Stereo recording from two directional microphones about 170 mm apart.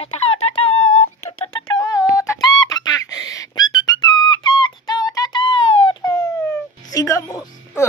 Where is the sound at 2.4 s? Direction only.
20° left (ahead or behind).